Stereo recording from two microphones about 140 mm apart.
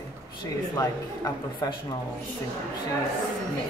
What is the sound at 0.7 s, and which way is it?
Speech, 25° left (ahead or behind).